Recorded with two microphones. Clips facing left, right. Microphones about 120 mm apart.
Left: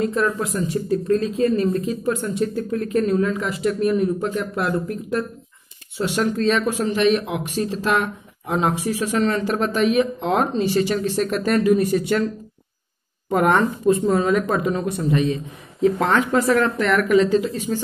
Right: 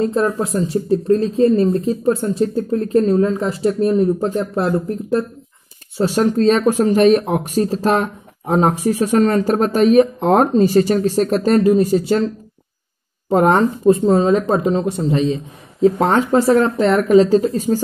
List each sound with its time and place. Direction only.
0.0 s speech: 30° right (ahead or behind)
13.3 s speech: 30° right (ahead or behind)